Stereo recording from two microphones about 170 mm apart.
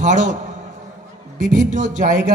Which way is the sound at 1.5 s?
45° right (ahead or behind).